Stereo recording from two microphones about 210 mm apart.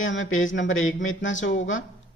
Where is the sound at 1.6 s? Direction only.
65° left (ahead or behind).